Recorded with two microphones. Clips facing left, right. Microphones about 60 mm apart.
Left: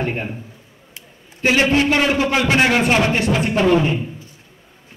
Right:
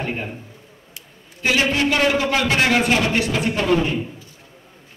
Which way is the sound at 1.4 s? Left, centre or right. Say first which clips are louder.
Left 3 dB; left.